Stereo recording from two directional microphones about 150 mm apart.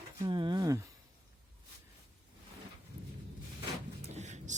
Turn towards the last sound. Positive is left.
turn(degrees=-50)  # may be behind; listen again after turning